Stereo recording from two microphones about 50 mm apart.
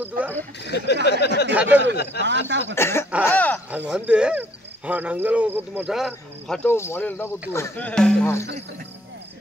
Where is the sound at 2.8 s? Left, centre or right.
Left.